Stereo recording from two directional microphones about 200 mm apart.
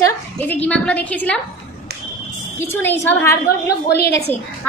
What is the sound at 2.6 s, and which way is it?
Speech, 10° left (ahead or behind).